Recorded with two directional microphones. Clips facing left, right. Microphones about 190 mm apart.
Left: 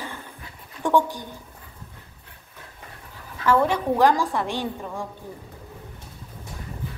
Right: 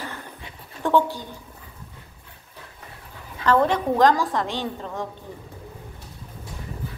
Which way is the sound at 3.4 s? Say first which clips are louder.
Right 1 dB; 10° left (ahead or behind).